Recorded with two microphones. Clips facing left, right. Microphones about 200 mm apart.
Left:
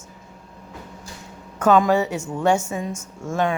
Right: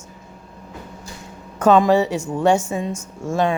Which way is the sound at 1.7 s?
30° right (ahead or behind).